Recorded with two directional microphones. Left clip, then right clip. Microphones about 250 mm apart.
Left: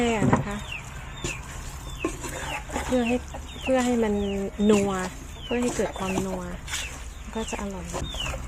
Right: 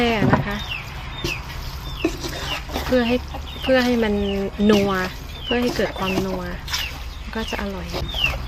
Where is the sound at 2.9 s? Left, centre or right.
Centre.